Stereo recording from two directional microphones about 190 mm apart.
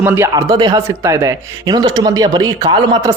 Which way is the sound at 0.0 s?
10° right (ahead or behind).